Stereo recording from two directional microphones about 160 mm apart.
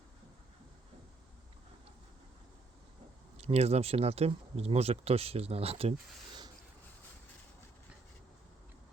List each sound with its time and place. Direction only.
3.3 s speech: 40° right (ahead or behind)